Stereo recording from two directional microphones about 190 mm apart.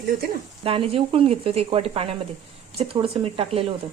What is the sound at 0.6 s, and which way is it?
Speech, 30° right (ahead or behind).